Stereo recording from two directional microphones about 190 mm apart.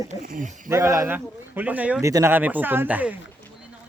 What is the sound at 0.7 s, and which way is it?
Speech, 15° right (ahead or behind).